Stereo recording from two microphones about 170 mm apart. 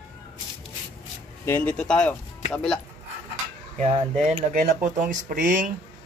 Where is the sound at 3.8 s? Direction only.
45° right (ahead or behind).